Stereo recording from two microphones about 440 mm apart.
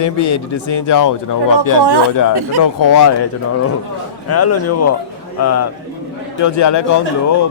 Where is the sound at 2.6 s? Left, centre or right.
Left.